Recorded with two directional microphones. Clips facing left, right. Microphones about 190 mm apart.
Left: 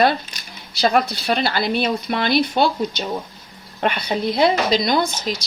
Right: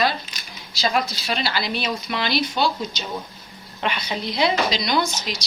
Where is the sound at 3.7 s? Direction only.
50° left (ahead or behind).